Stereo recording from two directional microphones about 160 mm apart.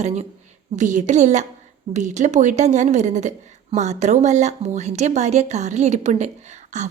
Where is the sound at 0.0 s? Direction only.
45° right (ahead or behind).